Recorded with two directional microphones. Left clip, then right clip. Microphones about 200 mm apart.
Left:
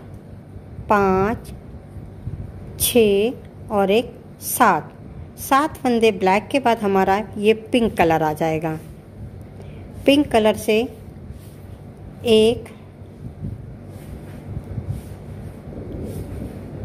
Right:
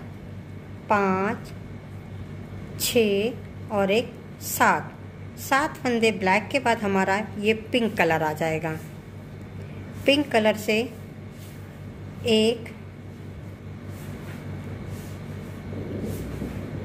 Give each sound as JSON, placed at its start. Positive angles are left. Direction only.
{"t": 0.8, "sound": "a woman's voice", "side_deg": 45}
{"t": 2.8, "sound": "a woman's voice", "side_deg": 45}
{"t": 10.0, "sound": "a woman's voice", "side_deg": 45}
{"t": 12.3, "sound": "a woman's voice", "side_deg": 45}